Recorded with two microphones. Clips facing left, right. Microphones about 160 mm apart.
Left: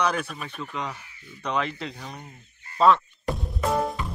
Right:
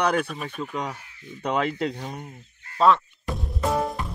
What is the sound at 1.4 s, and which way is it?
Speech, 50° right (ahead or behind).